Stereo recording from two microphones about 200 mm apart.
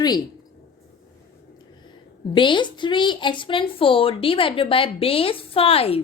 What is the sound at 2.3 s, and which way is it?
A woman's voice, 25° left (ahead or behind).